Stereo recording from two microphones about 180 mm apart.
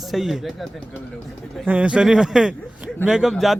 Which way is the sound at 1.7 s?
5° right (ahead or behind).